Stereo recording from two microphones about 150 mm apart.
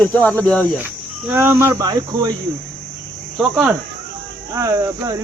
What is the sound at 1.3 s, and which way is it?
Cricket, 15° right (ahead or behind).